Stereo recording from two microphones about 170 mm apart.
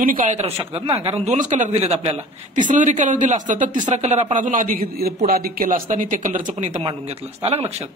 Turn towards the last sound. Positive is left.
turn(degrees=-40)  # may be behind; listen again after turning